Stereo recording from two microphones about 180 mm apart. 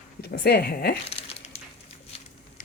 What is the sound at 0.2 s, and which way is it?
Speech, 60° left (ahead or behind).